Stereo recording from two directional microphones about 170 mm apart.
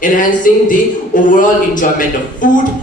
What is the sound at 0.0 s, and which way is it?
A man's voice, 50° left (ahead or behind).